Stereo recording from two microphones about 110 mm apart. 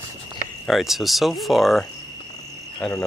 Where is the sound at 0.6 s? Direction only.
Centre (ahead or behind).